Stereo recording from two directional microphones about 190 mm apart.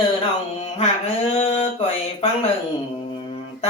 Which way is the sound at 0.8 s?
35° left (ahead or behind).